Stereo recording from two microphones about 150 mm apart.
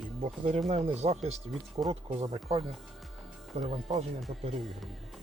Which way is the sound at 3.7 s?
40° right (ahead or behind).